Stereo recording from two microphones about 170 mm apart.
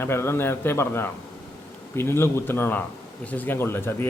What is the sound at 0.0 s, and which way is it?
Speech, 15° left (ahead or behind).